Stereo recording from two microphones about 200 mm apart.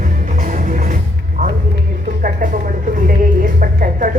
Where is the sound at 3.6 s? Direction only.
45° right (ahead or behind).